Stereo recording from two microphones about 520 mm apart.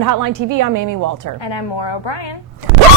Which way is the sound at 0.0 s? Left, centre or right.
Right.